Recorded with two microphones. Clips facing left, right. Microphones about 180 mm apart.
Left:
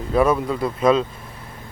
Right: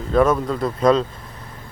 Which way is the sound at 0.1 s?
10° left (ahead or behind).